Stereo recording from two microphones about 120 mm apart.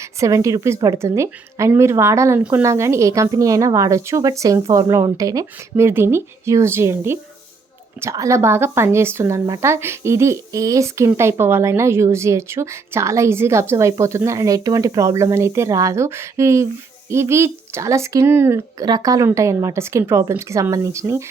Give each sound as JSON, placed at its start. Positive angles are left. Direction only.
{"t": 0.2, "sound": "speech", "side_deg": -25}
{"t": 18.8, "sound": "speech", "side_deg": -35}